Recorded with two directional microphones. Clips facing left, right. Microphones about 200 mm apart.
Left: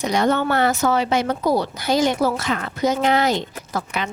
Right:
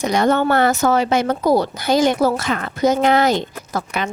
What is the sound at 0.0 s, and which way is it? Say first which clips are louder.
Speech: right 3 dB; 50° right (ahead or behind).